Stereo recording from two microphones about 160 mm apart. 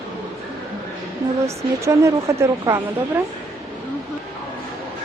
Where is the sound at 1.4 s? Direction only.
20° right (ahead or behind).